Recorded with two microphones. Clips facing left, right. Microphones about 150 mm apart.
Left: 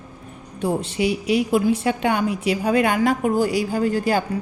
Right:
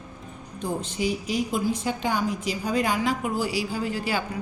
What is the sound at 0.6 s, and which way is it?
A woman's voice, 70° left (ahead or behind).